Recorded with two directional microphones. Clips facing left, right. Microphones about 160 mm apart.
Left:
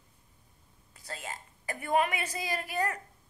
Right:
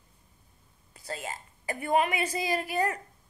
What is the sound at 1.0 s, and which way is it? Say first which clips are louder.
A woman's voice: right 4 dB; 10° right (ahead or behind).